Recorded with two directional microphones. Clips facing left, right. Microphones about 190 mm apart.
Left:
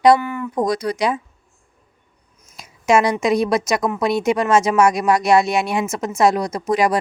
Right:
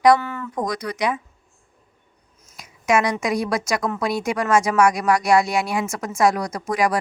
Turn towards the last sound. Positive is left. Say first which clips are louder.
# left 3 dB
turn(degrees=25)  # may be behind; listen again after turning